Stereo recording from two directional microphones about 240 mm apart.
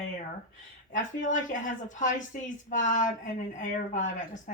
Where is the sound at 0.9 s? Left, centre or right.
Left.